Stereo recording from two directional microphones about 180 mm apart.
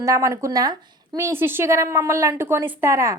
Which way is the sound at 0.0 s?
15° right (ahead or behind).